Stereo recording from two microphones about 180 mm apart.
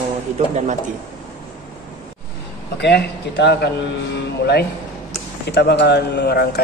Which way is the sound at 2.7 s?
70° left (ahead or behind).